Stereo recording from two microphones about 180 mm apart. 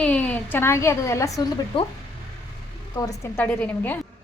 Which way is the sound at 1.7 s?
30° left (ahead or behind).